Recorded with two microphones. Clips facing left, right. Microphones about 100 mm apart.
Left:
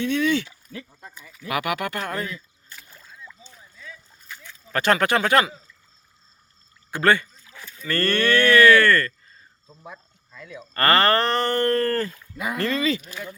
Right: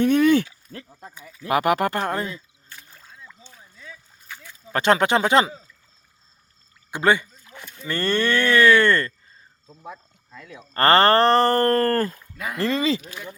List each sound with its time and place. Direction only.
0.0 s a sound: 50° right (ahead or behind)
1.5 s speech: 35° right (ahead or behind)
4.7 s speech: 20° right (ahead or behind)
6.9 s speech: 15° right (ahead or behind)
10.8 s speech: 30° right (ahead or behind)
12.5 s speech: 30° right (ahead or behind)